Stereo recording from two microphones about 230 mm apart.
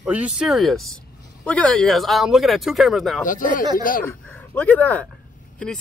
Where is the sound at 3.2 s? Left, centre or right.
Left.